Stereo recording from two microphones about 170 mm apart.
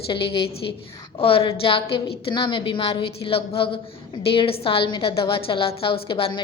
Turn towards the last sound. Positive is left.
turn(degrees=30)  # may be behind; listen again after turning